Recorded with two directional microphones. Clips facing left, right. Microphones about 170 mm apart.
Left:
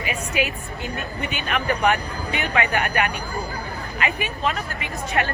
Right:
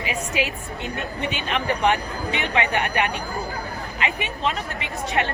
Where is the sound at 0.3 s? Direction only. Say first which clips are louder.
Left 3 dB; 25° right (ahead or behind).